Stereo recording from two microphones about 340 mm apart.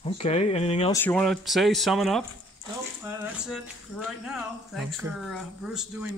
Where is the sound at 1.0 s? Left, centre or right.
Centre.